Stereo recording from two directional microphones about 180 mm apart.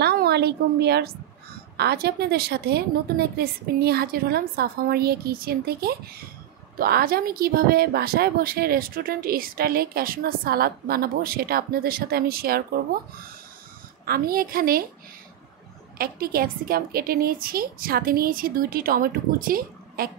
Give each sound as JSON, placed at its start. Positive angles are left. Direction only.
{"t": 0.0, "sound": "a woman's voice", "side_deg": -60}
{"t": 14.0, "sound": "speech", "side_deg": -55}
{"t": 16.0, "sound": "a woman's voice", "side_deg": -55}